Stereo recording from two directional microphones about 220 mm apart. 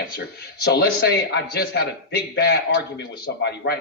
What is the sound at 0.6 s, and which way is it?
A man's voice, 45° left (ahead or behind).